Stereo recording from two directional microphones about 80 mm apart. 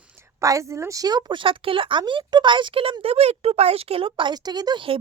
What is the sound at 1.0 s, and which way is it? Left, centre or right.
A woman's voice, right.